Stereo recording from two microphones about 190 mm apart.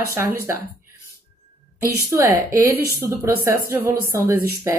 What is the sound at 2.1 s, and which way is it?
A woman's voice, 15° right (ahead or behind).